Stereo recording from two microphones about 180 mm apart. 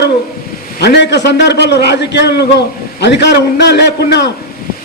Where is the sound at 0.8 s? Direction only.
65° left (ahead or behind).